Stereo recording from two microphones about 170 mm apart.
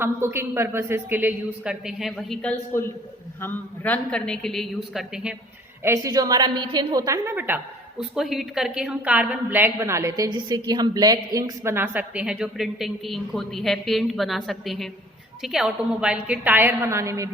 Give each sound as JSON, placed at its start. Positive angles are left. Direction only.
{"t": 0.0, "sound": "a man's voice", "side_deg": -15}
{"t": 5.8, "sound": "a woman's voice", "side_deg": -15}